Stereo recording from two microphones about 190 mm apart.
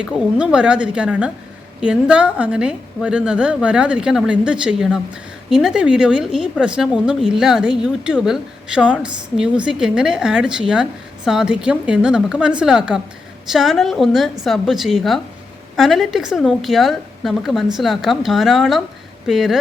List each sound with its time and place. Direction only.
0.0 s a woman's voice: 5° right (ahead or behind)